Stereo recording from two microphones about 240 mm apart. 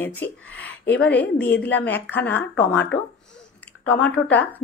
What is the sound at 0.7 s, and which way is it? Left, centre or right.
Speech, left.